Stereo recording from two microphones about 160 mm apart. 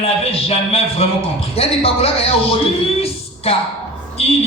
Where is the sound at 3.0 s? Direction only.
35° left (ahead or behind).